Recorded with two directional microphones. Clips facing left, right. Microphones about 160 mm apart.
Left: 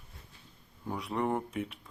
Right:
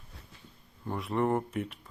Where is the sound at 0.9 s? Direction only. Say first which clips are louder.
Right 3 dB; centre (ahead or behind).